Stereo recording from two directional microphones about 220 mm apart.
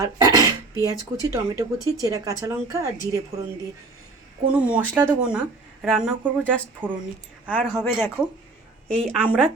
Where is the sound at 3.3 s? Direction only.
25° right (ahead or behind).